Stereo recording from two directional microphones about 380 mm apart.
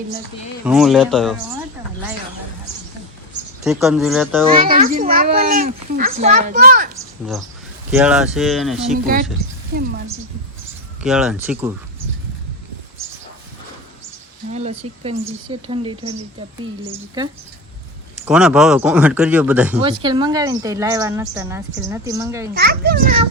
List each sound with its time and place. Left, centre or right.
0.6 s speech: centre
3.6 s speech: centre
4.6 s a child's voice: right
6.9 s speech: centre
11.0 s speech: centre
14.5 s speech: centre
18.3 s speech: centre
22.5 s a child's voice: right